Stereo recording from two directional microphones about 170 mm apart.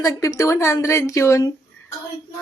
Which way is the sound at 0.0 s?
20° left (ahead or behind).